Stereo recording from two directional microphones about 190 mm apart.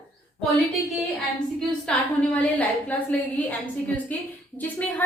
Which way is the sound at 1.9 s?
5° left (ahead or behind).